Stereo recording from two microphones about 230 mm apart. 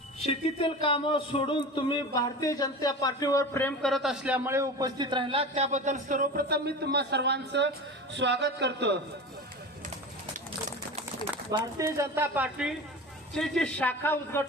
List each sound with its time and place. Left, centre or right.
0.2 s a man's voice: left; by 9.0 s right
11.5 s speech: centre